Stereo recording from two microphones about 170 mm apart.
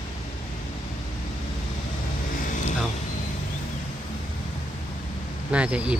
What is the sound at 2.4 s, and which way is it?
Vehicle, 50° left (ahead or behind).